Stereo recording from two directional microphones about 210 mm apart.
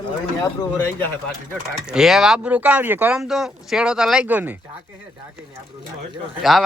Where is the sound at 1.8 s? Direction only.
5° right (ahead or behind).